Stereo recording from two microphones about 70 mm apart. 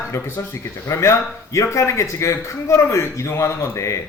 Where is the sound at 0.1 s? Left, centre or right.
Left.